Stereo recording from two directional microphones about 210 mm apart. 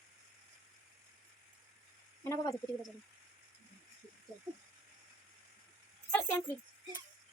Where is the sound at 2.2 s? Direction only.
15° left (ahead or behind).